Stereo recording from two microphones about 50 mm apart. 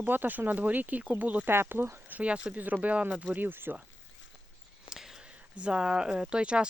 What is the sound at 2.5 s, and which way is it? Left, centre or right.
Speech, right.